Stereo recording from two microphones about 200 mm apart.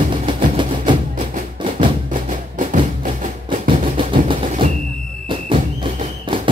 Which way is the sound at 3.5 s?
25° right (ahead or behind).